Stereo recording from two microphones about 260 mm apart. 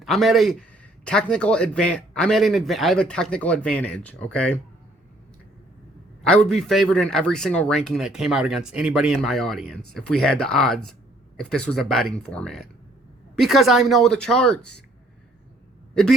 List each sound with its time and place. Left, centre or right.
0.0 s a man's voice: centre
6.2 s a man's voice: centre